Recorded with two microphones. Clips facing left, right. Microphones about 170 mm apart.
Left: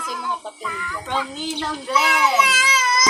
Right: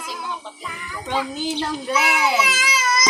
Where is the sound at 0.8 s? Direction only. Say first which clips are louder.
Right 2 dB; 15° right (ahead or behind).